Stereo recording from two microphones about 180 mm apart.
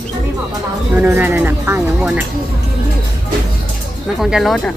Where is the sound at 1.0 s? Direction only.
10° right (ahead or behind).